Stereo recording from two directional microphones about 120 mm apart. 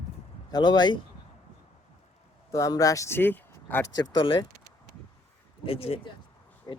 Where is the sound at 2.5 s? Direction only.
30° left (ahead or behind).